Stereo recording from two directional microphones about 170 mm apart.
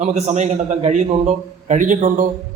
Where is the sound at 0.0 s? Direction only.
40° right (ahead or behind).